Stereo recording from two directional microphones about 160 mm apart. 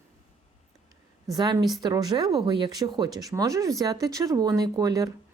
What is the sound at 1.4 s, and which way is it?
Speech, 25° right (ahead or behind).